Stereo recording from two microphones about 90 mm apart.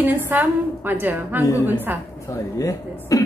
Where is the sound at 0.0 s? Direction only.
20° right (ahead or behind).